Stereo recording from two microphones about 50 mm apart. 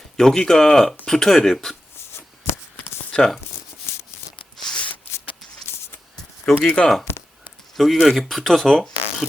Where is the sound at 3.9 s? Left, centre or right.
Left.